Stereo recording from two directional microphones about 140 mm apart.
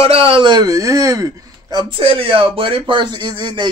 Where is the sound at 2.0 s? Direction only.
40° right (ahead or behind).